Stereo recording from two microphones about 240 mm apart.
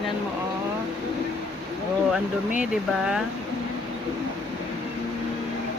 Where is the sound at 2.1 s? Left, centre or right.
Centre.